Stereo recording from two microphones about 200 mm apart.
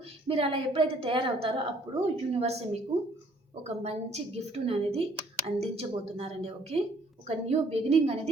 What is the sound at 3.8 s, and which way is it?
A woman's voice, 30° right (ahead or behind).